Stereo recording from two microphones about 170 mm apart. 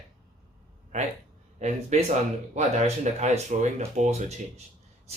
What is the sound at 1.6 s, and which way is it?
Speech, 40° right (ahead or behind).